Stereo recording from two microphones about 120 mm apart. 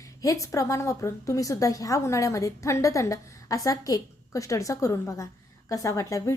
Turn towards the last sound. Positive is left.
turn(degrees=25)  # may be behind; listen again after turning